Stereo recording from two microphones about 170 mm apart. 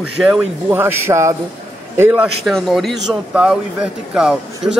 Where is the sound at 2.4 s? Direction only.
Centre (ahead or behind).